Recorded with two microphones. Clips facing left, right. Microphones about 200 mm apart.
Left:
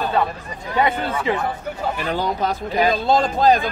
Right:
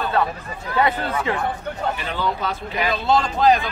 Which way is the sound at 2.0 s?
40° left (ahead or behind).